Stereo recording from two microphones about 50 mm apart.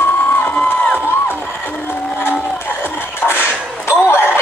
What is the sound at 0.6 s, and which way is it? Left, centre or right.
Crowd, left.